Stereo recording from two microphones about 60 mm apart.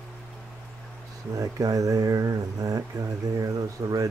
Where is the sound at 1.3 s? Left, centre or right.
Right.